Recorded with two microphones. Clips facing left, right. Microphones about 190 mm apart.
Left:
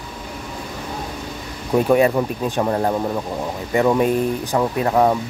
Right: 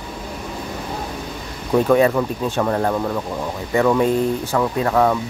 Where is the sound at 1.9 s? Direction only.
20° left (ahead or behind).